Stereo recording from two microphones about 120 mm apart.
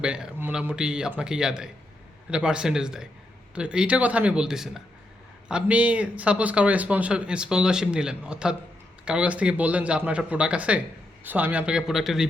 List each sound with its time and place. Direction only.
0.0 s a man's voice: 10° right (ahead or behind)